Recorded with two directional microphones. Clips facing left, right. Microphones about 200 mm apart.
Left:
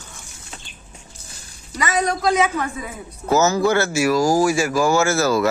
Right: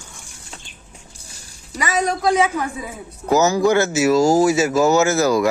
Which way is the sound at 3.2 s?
15° right (ahead or behind).